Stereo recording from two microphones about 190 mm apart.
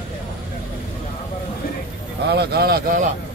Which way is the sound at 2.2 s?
60° right (ahead or behind).